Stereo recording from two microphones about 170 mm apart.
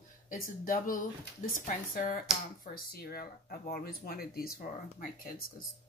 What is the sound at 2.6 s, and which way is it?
Speech, 60° left (ahead or behind).